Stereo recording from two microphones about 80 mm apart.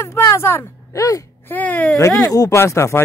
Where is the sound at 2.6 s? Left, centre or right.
Left.